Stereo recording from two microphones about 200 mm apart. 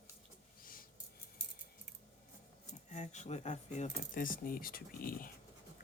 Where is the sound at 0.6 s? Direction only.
45° left (ahead or behind).